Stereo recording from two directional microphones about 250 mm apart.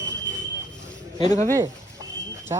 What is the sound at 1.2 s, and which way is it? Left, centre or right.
Speech, centre.